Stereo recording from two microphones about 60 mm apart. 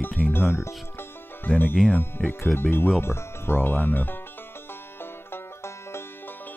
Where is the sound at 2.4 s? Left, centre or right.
Left.